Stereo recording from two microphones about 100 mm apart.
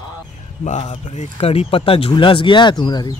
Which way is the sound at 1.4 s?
85° left.